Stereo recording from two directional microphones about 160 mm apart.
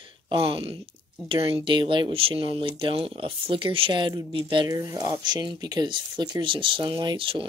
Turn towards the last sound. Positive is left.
turn(degrees=-30)  # may be behind; listen again after turning